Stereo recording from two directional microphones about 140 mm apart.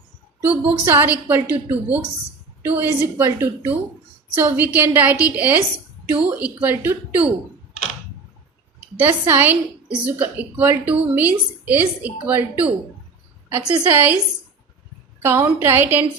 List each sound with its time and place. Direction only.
0.4 s a woman's voice: 10° right (ahead or behind)
9.0 s a woman's voice: 15° right (ahead or behind)
15.2 s a woman's voice: 15° right (ahead or behind)